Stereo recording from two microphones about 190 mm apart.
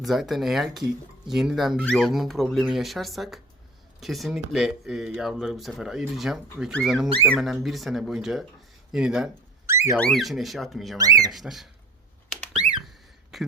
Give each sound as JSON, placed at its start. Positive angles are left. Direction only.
{"t": 0.0, "sound": "speech", "side_deg": 0}
{"t": 9.6, "sound": "car alarm", "side_deg": -15}
{"t": 10.0, "sound": "speech", "side_deg": 0}
{"t": 10.9, "sound": "speech", "side_deg": -20}
{"t": 11.3, "sound": "speech", "side_deg": 0}
{"t": 12.8, "sound": "a sound", "side_deg": 0}